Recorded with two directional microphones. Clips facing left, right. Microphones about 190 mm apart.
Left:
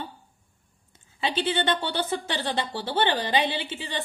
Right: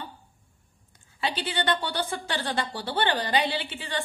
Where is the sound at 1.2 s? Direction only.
20° left (ahead or behind).